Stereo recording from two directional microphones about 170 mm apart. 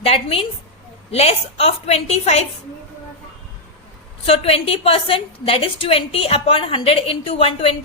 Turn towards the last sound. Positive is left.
turn(degrees=35)  # may be behind; listen again after turning